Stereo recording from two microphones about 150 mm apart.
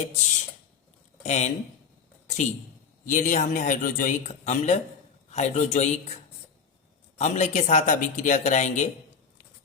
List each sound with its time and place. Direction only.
0.0 s speech: 50° left (ahead or behind)
7.2 s speech: 50° left (ahead or behind)